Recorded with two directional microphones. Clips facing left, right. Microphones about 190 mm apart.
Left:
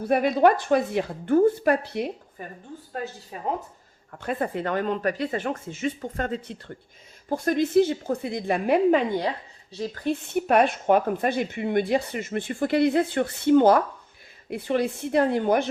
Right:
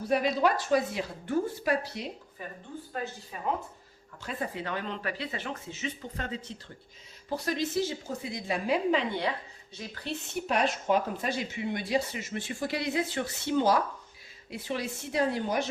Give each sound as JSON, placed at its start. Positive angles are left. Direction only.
{"t": 0.0, "sound": "speech", "side_deg": 55}
{"t": 4.1, "sound": "speech", "side_deg": 55}